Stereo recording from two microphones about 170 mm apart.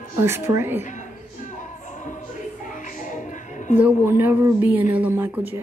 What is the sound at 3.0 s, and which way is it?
Music, 45° left (ahead or behind).